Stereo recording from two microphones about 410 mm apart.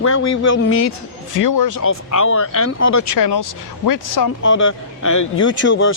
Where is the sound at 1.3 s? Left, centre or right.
Left.